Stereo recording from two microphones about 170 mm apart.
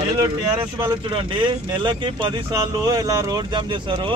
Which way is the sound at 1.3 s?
25° right (ahead or behind).